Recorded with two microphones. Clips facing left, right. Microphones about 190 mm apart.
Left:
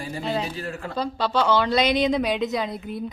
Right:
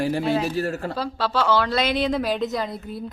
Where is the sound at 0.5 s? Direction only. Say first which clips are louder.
Right 7 dB; 40° right (ahead or behind).